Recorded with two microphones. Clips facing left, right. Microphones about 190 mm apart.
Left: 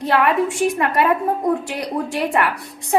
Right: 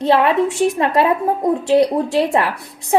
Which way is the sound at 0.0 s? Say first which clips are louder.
Right 4 dB; 25° right (ahead or behind).